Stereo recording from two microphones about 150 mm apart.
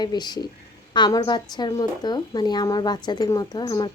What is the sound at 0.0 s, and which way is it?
Speech, 30° left (ahead or behind).